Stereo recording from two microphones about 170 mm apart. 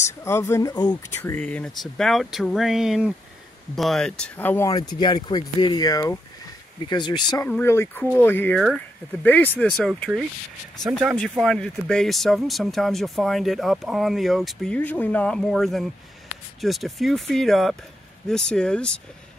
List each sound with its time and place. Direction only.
0.0 s speech: 15° left (ahead or behind)
1.2 s speech: 10° left (ahead or behind); by 7.4 s 25° left (ahead or behind)
7.4 s speech: 15° left (ahead or behind)